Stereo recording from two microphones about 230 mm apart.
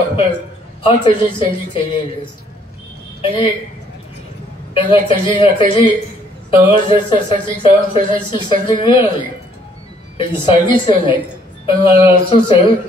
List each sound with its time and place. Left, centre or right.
0.8 s speech: centre
3.2 s a woman's voice: left
4.7 s speech: left
10.1 s speech: left